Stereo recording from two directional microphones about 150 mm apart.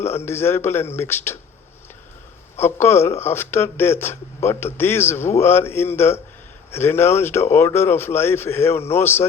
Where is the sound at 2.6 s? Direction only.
15° left (ahead or behind).